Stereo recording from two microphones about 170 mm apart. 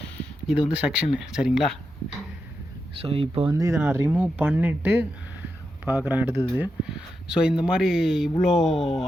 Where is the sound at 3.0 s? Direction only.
35° right (ahead or behind).